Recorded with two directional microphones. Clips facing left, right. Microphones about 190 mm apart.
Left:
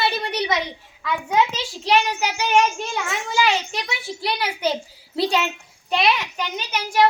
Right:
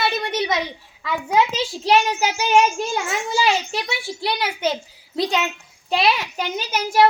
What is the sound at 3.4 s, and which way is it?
A child's voice, 30° right (ahead or behind).